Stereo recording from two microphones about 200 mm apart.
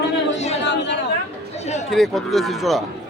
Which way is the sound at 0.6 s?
60° left (ahead or behind).